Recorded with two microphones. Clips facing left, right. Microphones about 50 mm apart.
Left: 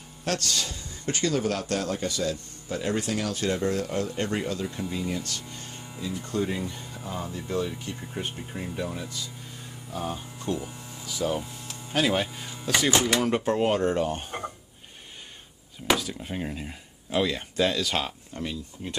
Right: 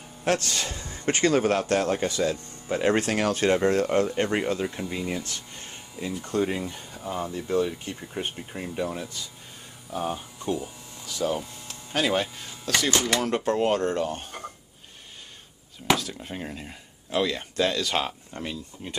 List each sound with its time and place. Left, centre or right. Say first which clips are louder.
0.2 s a man's voice: right 3 dB; right
2.9 s a man's voice: right 4 dB; right
4.1 s speech: right 4 dB; right
8.4 s speech: right 2 dB; centre
10.0 s speech: right 2 dB; centre
11.0 s speech: right 1 dB; centre
15.9 s speech: right 1 dB; centre